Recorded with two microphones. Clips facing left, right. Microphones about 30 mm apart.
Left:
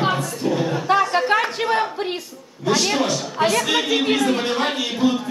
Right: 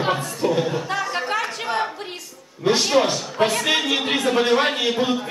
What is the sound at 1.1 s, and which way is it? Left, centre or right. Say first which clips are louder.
Chatter: left 5 dB; left.